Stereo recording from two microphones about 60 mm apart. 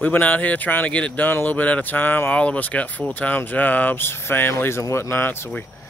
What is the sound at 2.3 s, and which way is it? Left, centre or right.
Speech, left.